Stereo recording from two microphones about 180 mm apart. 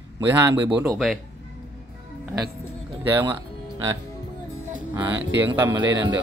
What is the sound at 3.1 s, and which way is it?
Speech, 15° right (ahead or behind).